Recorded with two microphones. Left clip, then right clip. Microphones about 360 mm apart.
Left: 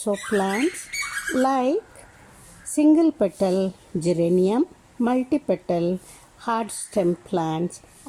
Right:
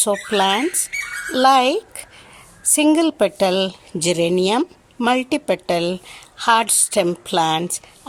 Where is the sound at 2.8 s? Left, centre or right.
Right.